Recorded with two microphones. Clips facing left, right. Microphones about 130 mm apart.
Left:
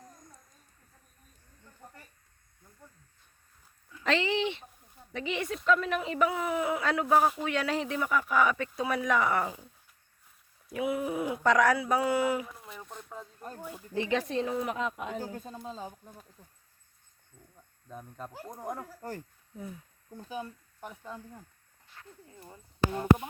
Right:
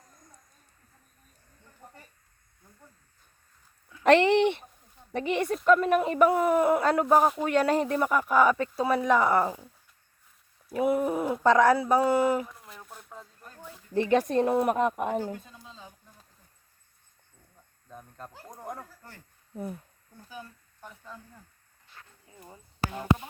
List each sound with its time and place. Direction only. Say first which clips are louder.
4.0 s speech: right 9 dB; 60° right (ahead or behind); by 9.6 s 35° right (ahead or behind)
10.8 s speech: right 5 dB; 45° right (ahead or behind)
11.4 s a man's voice: right 4 dB; 30° right (ahead or behind)
12.0 s speech: right 4 dB; 45° right (ahead or behind)
12.5 s a sound: left 2 dB; centre (ahead or behind)
13.6 s speech: left 1 dB; 15° left (ahead or behind)
13.9 s speech: right 6 dB; 50° right (ahead or behind)
15.4 s speech: left 9 dB; 45° left (ahead or behind)
17.8 s speech: left 2 dB; 5° left (ahead or behind)
19.5 s speech: right 6 dB; 60° right (ahead or behind)
20.1 s speech: left 6 dB; 25° left (ahead or behind)